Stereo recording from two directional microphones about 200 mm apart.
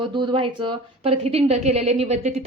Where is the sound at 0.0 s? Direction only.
25° right (ahead or behind).